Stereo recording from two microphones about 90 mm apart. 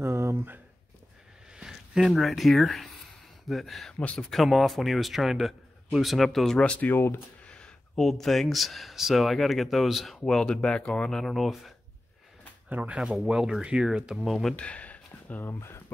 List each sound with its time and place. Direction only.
0.0 s a sound: 35° right (ahead or behind)
1.5 s speech: 10° right (ahead or behind); by 7.2 s 25° left (ahead or behind)
7.4 s speech: 10° left (ahead or behind)
12.6 s speech: 15° right (ahead or behind)
12.9 s speech: 5° right (ahead or behind)
14.5 s speech: 15° left (ahead or behind)